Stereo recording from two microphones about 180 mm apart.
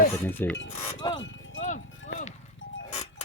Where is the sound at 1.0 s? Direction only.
25° left (ahead or behind).